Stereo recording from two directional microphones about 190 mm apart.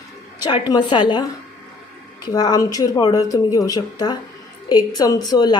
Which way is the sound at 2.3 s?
20° left (ahead or behind).